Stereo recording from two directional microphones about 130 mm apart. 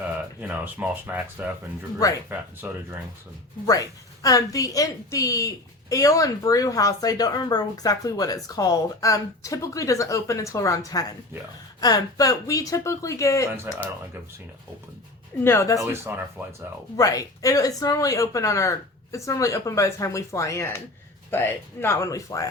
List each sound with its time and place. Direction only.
0.4 s speech: 10° right (ahead or behind)
2.6 s speech: 15° right (ahead or behind)
3.7 s a woman's voice: 25° left (ahead or behind)
15.4 s a woman's voice: 25° left (ahead or behind)
16.1 s speech: 15° right (ahead or behind)
17.0 s a woman's voice: 25° left (ahead or behind)